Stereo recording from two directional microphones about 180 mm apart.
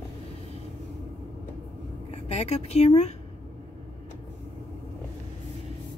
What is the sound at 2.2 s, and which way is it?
Speech, 35° left (ahead or behind).